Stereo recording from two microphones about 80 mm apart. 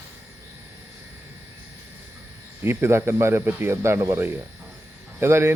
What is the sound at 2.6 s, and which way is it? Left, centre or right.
Speech, right.